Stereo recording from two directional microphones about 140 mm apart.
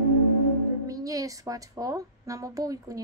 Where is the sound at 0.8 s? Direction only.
25° right (ahead or behind).